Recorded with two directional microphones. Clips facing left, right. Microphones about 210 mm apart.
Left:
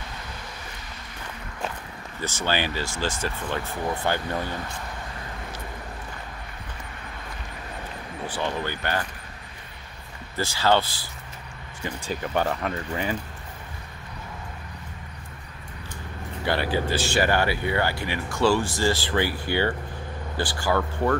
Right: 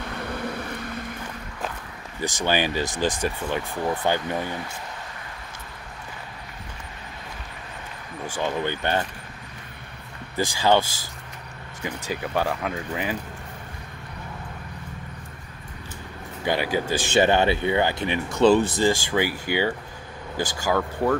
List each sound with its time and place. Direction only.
0.2 s vehicle: 60° right (ahead or behind)
2.2 s speech: 15° right (ahead or behind)
8.4 s speech: 20° right (ahead or behind)
10.3 s speech: 15° right (ahead or behind)
16.4 s speech: 15° right (ahead or behind)